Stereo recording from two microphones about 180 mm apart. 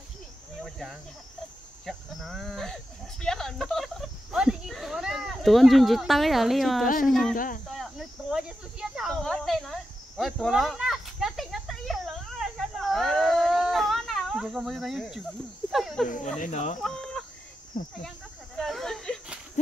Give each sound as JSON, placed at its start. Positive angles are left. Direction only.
{"t": 0.6, "sound": "cricket", "side_deg": 0}
{"t": 1.9, "sound": "speech", "side_deg": 0}
{"t": 7.3, "sound": "speech", "side_deg": 50}
{"t": 7.6, "sound": "cricket", "side_deg": 0}
{"t": 15.7, "sound": "snake", "side_deg": 0}
{"t": 16.3, "sound": "speech", "side_deg": 45}
{"t": 16.8, "sound": "chicken", "side_deg": 5}
{"t": 17.8, "sound": "speech", "side_deg": 50}
{"t": 18.6, "sound": "a sound", "side_deg": 0}